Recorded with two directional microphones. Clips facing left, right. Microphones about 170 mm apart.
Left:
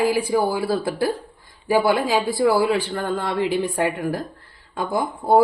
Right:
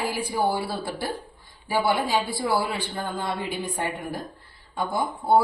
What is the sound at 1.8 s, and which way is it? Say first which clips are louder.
A woman's voice: even; 90° left.